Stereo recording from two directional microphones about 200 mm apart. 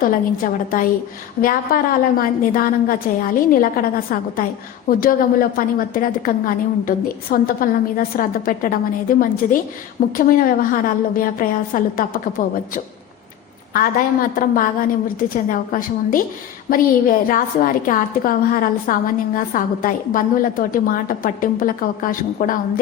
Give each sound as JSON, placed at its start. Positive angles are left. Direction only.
{"t": 0.0, "sound": "a woman's voice", "side_deg": 45}